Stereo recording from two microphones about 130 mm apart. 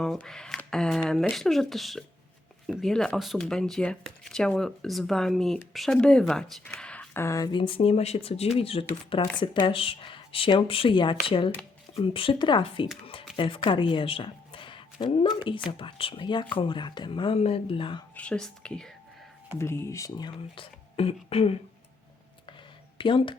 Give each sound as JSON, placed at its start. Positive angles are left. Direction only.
{"t": 0.0, "sound": "a woman's voice", "side_deg": 5}
{"t": 18.1, "sound": "speech", "side_deg": 10}
{"t": 19.5, "sound": "speech", "side_deg": 20}
{"t": 23.0, "sound": "speech", "side_deg": 40}